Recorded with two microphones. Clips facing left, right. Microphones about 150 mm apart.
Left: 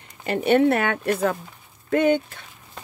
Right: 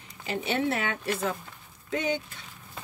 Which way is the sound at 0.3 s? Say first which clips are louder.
Left 10 dB; 55° left (ahead or behind).